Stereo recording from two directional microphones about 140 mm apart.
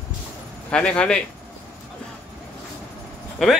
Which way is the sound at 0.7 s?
10° left (ahead or behind).